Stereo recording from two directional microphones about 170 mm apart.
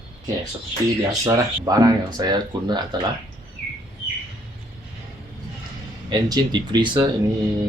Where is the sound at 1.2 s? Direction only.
20° right (ahead or behind).